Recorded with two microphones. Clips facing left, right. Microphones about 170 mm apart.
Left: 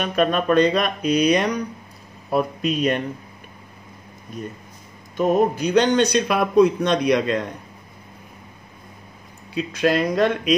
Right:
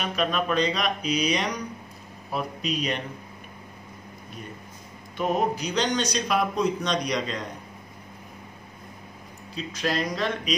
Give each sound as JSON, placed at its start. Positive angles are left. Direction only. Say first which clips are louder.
{"t": 0.0, "sound": "speech", "louder": "left 6 dB", "side_deg": 50}
{"t": 5.1, "sound": "a man's voice", "louder": "left 7 dB", "side_deg": 45}
{"t": 9.5, "sound": "a man's voice", "louder": "left 8 dB", "side_deg": 60}